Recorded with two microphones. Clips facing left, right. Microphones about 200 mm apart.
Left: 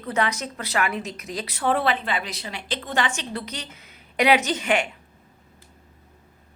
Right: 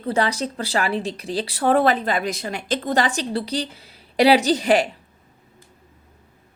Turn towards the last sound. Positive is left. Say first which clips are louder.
# right 6 dB
turn(degrees=-35)  # may be behind; listen again after turning